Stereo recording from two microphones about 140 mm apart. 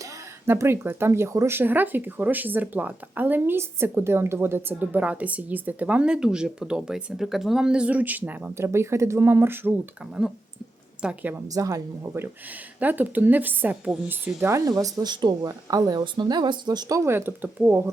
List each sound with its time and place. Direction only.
0.0 s speech: 20° right (ahead or behind)
11.0 s speech: 10° right (ahead or behind)
11.4 s speech: 25° right (ahead or behind); by 14.3 s 5° right (ahead or behind)
14.3 s speech: 20° right (ahead or behind)